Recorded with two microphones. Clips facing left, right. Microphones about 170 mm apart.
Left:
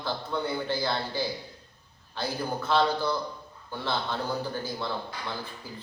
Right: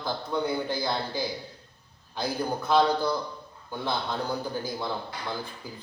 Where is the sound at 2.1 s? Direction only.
15° right (ahead or behind).